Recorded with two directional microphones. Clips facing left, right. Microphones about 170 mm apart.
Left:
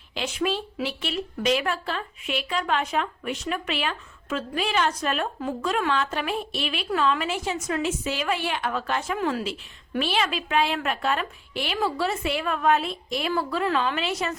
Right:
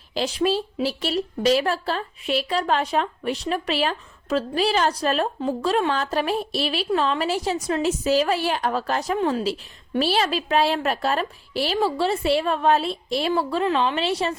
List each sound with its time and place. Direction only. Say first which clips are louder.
0.1 s a woman's voice: right 5 dB; 35° right (ahead or behind)